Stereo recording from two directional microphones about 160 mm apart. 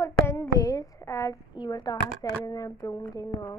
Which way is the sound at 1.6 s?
25° left (ahead or behind).